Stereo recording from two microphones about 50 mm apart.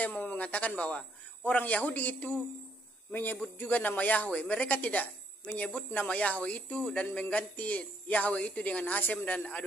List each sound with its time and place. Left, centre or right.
0.0 s a man's voice: left